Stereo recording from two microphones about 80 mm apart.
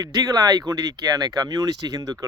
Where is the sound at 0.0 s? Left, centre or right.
Right.